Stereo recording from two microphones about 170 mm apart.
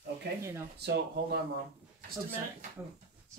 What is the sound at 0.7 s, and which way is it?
Speech, 75° right (ahead or behind).